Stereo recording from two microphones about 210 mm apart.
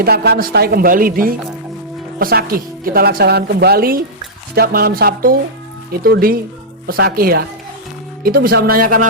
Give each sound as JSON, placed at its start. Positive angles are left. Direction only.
{"t": 0.0, "sound": "a woman's voice", "side_deg": -50}